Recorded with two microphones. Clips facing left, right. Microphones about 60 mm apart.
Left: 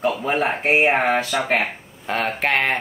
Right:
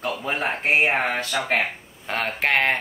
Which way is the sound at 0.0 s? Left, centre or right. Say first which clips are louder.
Left 5 dB; centre.